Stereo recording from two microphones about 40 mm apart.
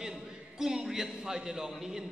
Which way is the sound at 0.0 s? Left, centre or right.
Centre.